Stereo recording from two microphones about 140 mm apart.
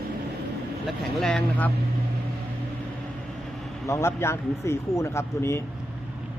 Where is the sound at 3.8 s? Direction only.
20° left (ahead or behind).